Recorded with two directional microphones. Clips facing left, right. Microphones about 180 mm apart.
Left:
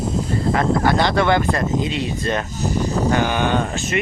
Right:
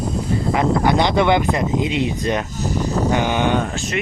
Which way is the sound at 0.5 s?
20° right (ahead or behind).